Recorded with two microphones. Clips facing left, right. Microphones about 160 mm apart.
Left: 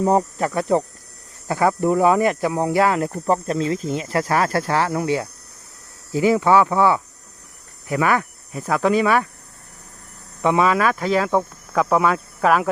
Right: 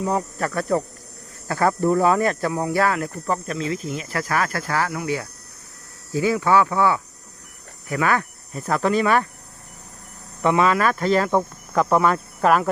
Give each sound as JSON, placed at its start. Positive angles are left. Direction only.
{"t": 0.0, "sound": "speech", "side_deg": 35}
{"t": 0.3, "sound": "speech", "side_deg": 20}
{"t": 10.4, "sound": "speech", "side_deg": 15}